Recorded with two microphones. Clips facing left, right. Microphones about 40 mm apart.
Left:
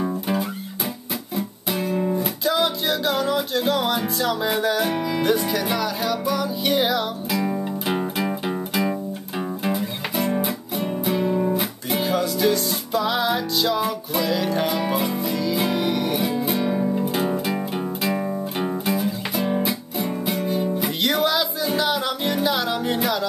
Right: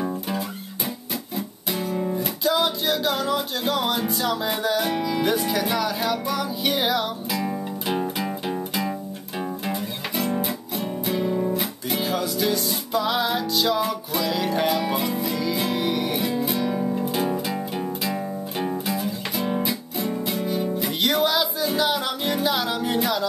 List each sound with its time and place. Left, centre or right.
0.0 s music: centre
1.8 s music: left
2.1 s music: centre
11.1 s guitar: centre
11.5 s music: centre